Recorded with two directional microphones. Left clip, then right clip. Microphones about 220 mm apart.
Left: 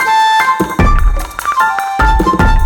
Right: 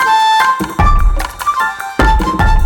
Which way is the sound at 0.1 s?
Centre (ahead or behind).